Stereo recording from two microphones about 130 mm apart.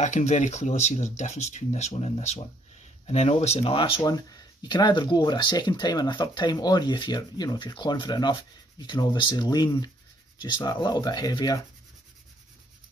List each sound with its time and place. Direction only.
0.0 s speech: 65° left (ahead or behind); by 4.0 s 45° left (ahead or behind)
4.0 s speech: 30° left (ahead or behind)